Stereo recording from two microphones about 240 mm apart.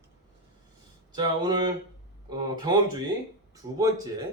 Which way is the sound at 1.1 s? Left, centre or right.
Centre.